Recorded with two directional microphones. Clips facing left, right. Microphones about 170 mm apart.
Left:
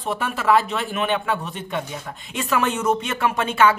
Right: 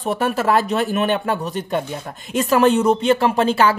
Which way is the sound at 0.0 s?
40° right (ahead or behind).